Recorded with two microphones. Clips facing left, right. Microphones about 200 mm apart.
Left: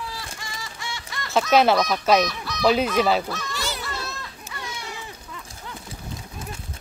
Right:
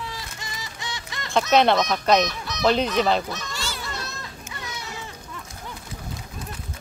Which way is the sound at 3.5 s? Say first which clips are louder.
Left 3 dB; 15° left (ahead or behind).